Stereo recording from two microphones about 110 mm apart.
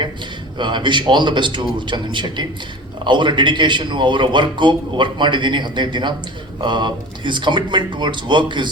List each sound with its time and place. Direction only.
0.6 s speech: 45° right (ahead or behind)